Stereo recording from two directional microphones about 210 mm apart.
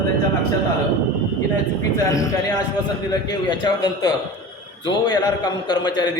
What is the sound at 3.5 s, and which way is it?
A man's voice, 20° left (ahead or behind).